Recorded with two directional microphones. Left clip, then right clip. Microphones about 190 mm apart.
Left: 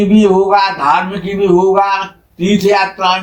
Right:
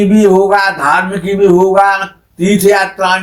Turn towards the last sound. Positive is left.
turn(degrees=-45)  # may be behind; listen again after turning